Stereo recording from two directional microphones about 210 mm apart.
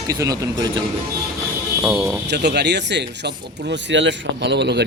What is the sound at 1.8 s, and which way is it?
Speech, 10° right (ahead or behind).